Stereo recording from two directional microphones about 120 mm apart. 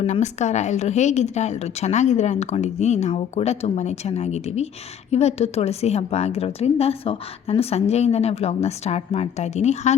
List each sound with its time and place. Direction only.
0.0 s a woman's voice: 75° left (ahead or behind)